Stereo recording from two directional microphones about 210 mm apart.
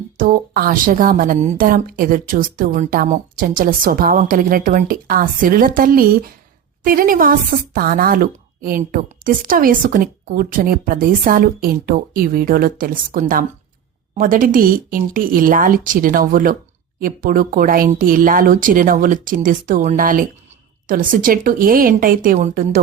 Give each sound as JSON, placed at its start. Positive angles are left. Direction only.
{"t": 0.2, "sound": "a woman's voice", "side_deg": -45}